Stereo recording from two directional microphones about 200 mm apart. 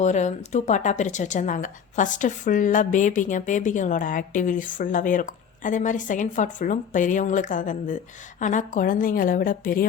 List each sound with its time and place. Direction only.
0.0 s a woman's voice: 35° left (ahead or behind)